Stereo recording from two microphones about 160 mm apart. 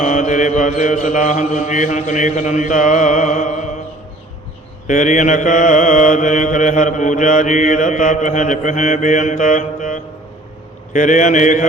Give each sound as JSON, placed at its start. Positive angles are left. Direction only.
{"t": 0.0, "sound": "mantra", "side_deg": 50}
{"t": 4.9, "sound": "mantra", "side_deg": 50}